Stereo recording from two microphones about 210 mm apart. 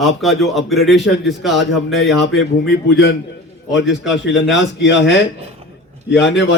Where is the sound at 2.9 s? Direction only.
55° left (ahead or behind).